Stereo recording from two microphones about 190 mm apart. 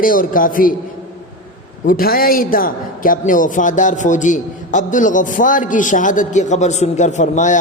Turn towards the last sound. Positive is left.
turn(degrees=40)  # may be behind; listen again after turning